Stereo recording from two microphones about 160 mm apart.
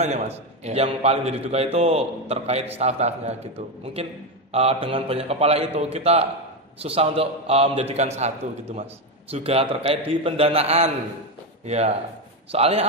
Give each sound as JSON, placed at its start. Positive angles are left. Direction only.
{"t": 0.0, "sound": "a man's voice", "side_deg": -45}
{"t": 9.3, "sound": "a man's voice", "side_deg": -35}